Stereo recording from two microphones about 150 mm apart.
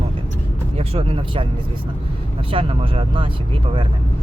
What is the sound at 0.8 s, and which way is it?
Speech, 40° right (ahead or behind).